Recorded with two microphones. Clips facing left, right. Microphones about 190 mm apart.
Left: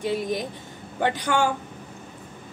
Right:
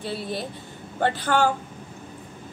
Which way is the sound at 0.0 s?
15° left (ahead or behind).